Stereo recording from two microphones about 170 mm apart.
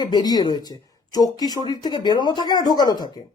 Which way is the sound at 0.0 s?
25° left (ahead or behind).